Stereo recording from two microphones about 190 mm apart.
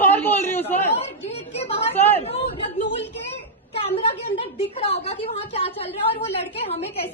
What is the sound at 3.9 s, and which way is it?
A woman's voice, 30° left (ahead or behind).